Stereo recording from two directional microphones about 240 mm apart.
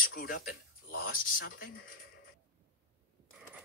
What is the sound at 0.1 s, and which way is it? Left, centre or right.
Speech, left.